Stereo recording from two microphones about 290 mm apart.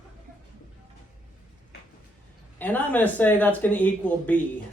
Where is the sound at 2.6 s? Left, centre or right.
Centre.